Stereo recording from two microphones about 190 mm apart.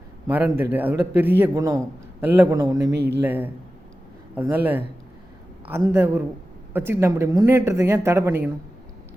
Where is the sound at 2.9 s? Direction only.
60° right (ahead or behind).